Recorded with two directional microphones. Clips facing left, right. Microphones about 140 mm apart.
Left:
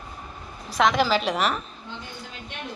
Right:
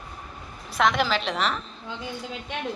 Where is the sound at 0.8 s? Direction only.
Centre (ahead or behind).